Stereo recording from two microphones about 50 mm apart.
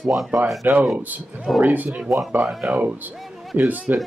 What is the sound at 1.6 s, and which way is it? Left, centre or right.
Speech, right.